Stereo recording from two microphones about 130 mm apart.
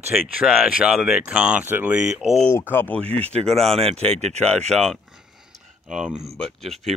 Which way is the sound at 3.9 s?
55° right (ahead or behind).